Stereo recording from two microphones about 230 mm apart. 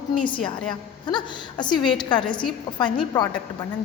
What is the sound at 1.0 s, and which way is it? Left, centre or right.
A woman's voice, centre.